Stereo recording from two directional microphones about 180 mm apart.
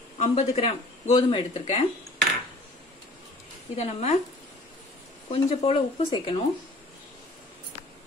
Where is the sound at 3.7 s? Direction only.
35° left (ahead or behind).